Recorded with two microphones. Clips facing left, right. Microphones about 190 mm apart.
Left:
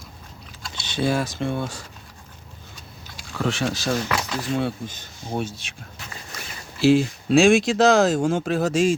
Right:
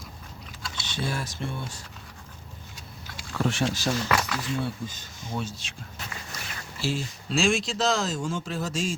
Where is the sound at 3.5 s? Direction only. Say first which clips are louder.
Left 3 dB; 90° left.